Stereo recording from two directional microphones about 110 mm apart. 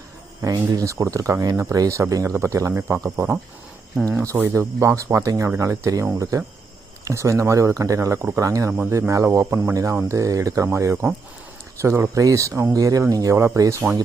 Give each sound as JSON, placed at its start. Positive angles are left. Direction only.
{"t": 0.4, "sound": "speech", "side_deg": -35}